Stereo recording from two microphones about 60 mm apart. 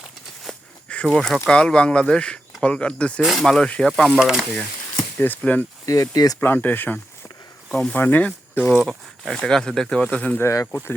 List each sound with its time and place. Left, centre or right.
0.5 s a sound: centre
1.1 s speech: centre
3.2 s speech: centre
4.2 s speech: centre
5.1 s speech: left
5.4 s speech: left
5.8 s speech: left
6.4 s speech: left
7.7 s speech: centre
7.9 s speech: left
8.9 s speech: centre
10.4 s speech: left
10.7 s speech: left